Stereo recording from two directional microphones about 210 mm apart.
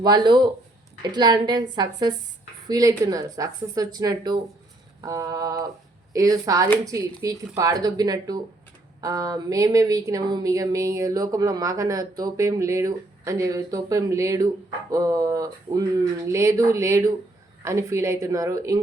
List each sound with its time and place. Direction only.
0.0 s a woman's voice: 20° right (ahead or behind)